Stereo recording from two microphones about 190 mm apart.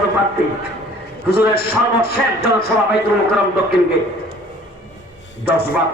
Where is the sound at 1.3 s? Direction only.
55° left (ahead or behind).